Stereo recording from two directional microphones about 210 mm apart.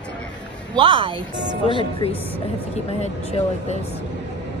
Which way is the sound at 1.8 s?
25° left (ahead or behind).